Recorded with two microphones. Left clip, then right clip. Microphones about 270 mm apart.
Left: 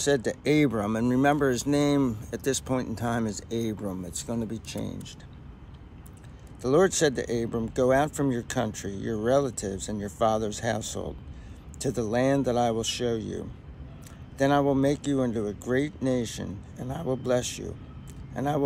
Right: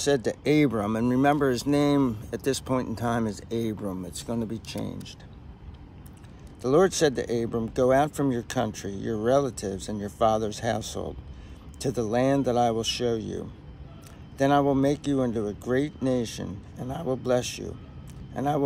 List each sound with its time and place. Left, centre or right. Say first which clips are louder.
0.0 s speech: right 1 dB; centre
6.6 s speech: right 1 dB; centre